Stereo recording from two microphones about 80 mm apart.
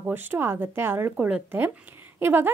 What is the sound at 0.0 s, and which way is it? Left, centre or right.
Speech, right.